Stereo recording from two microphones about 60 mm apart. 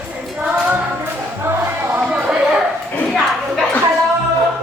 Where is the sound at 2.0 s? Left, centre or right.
Centre.